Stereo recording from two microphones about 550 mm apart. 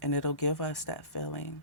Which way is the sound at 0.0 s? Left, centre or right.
Left.